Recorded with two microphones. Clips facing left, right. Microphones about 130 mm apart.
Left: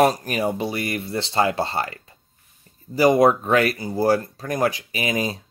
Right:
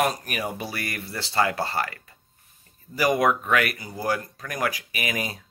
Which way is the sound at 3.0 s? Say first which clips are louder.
Left 6 dB; 30° left (ahead or behind).